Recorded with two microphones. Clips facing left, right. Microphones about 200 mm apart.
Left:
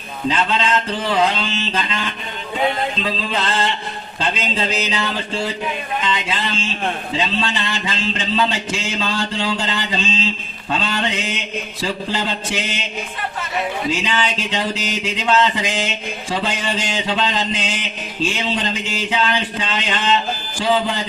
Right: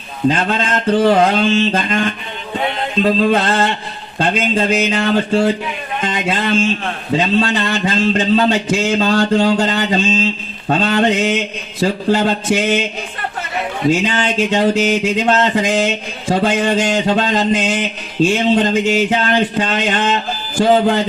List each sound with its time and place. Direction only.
0.3 s a man's voice: 50° right (ahead or behind)
13.9 s a man's voice: 45° right (ahead or behind)